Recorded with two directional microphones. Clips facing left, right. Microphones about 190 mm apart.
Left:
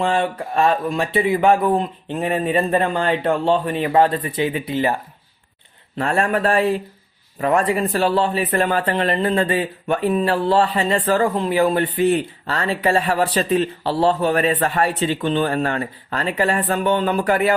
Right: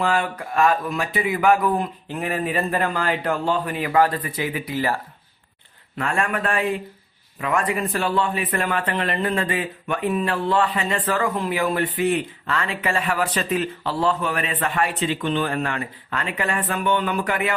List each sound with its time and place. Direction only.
0.0 s speech: 25° left (ahead or behind)
6.0 s speech: 35° left (ahead or behind)